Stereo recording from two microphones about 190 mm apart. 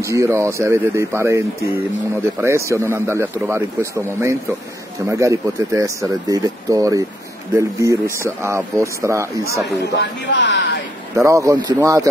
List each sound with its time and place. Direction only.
0.0 s speech: 15° right (ahead or behind)
9.9 s speech: 70° left (ahead or behind)
11.2 s speech: 15° right (ahead or behind)